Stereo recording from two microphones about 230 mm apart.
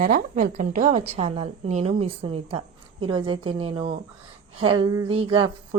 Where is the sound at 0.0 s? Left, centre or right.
Right.